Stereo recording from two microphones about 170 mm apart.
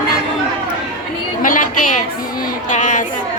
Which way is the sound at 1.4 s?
50° left (ahead or behind).